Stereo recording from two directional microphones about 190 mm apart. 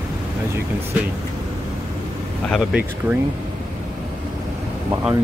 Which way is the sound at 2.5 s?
5° right (ahead or behind).